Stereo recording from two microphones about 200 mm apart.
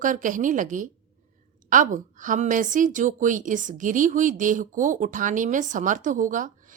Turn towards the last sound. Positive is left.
turn(degrees=-40)  # may be behind; listen again after turning